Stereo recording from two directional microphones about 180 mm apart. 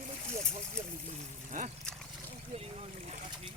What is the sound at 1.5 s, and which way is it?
Speech, 45° right (ahead or behind).